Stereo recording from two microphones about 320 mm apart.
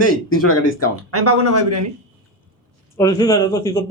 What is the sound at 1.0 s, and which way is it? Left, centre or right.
Speech, right.